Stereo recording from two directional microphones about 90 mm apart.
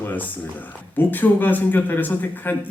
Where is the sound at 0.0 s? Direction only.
20° left (ahead or behind).